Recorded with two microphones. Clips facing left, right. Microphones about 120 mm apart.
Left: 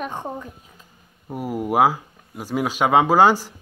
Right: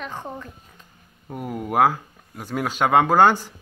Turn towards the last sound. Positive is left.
turn(degrees=5)  # may be behind; listen again after turning